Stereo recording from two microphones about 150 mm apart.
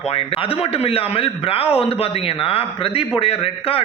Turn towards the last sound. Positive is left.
turn(degrees=40)  # may be behind; listen again after turning